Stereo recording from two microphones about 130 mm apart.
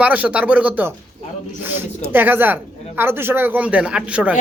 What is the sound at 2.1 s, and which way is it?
Speech, 15° right (ahead or behind).